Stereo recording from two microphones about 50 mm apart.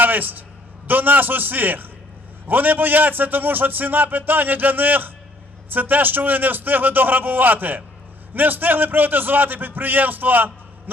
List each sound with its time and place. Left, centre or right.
0.0 s a man's voice: right